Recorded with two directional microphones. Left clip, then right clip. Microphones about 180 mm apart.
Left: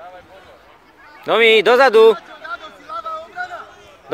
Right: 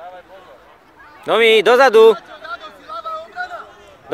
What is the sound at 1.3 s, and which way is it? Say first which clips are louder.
Speech: even; centre (ahead or behind).